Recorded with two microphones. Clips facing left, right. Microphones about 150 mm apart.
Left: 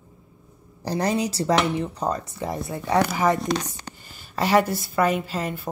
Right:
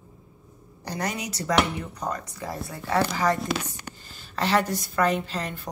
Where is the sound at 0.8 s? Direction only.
30° left (ahead or behind).